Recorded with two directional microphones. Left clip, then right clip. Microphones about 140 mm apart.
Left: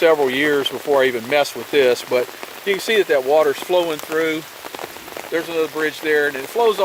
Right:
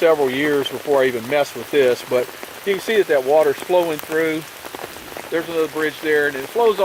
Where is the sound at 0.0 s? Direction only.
40° left (ahead or behind).